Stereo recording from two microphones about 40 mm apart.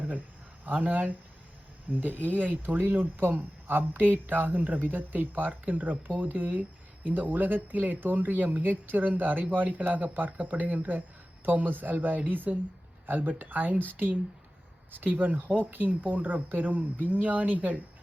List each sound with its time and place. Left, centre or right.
0.6 s speech: right
3.2 s speech: right